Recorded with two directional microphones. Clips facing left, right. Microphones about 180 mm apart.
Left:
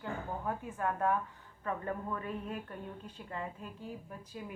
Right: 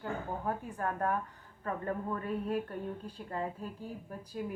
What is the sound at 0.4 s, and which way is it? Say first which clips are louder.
A woman's voice: left 1 dB; 40° right (ahead or behind).